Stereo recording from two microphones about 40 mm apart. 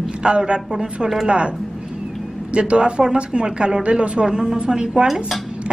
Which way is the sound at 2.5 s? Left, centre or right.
Right.